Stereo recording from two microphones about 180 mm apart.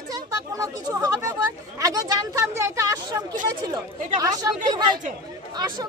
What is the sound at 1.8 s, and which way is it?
Speech, 20° right (ahead or behind).